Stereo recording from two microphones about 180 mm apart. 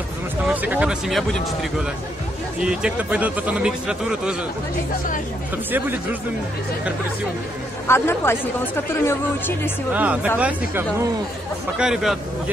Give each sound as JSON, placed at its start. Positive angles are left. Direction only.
{"t": 0.5, "sound": "speech", "side_deg": -10}
{"t": 5.7, "sound": "speech", "side_deg": -10}
{"t": 7.9, "sound": "a woman's voice", "side_deg": 15}
{"t": 9.9, "sound": "speech", "side_deg": -10}